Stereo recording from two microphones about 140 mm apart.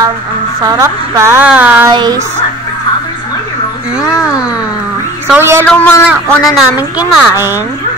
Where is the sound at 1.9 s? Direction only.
30° right (ahead or behind).